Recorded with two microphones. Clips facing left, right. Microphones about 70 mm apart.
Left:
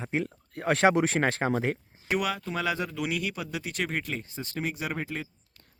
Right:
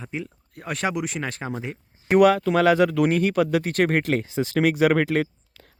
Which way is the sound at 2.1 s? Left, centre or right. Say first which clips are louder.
Right 13 dB; right.